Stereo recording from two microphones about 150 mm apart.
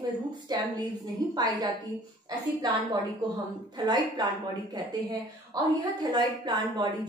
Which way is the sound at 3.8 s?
30° right (ahead or behind).